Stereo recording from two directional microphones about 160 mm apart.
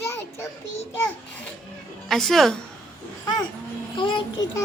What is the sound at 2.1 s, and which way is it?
Speech, centre (ahead or behind).